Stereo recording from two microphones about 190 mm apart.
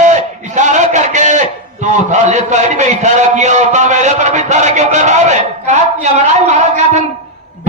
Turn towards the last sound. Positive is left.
turn(degrees=-40)  # may be behind; listen again after turning